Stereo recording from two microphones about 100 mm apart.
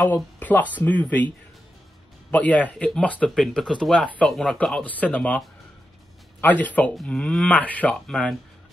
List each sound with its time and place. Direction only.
0.1 s speech: 15° left (ahead or behind)
2.3 s speech: 15° left (ahead or behind)
3.3 s speech: centre (ahead or behind)
6.4 s speech: 15° left (ahead or behind)
8.1 s speech: 5° left (ahead or behind)